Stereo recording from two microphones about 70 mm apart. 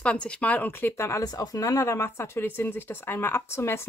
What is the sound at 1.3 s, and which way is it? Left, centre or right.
Speech, left.